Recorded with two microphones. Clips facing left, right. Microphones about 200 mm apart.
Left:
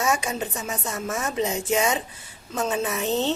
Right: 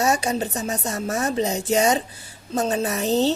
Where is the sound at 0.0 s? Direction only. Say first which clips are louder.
Right 4 dB; 35° right (ahead or behind).